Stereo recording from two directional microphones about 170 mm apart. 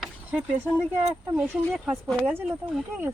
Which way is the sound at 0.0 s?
10° right (ahead or behind).